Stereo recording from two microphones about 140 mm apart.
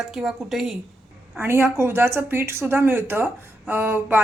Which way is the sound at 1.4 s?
15° right (ahead or behind).